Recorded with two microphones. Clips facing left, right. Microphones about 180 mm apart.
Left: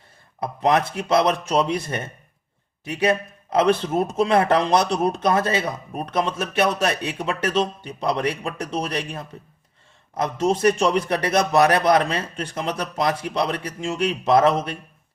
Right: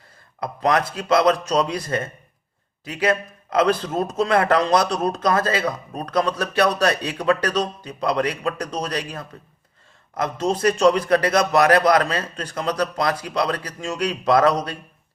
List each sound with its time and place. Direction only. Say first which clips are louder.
0.3 s a man's voice: left 1 dB; 30° left (ahead or behind)